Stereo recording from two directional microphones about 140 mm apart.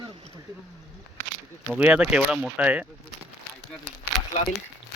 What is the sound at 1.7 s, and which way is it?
Speech, 10° right (ahead or behind).